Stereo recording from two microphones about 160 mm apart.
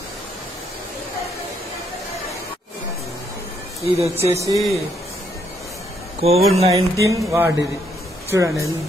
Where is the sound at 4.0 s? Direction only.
15° right (ahead or behind).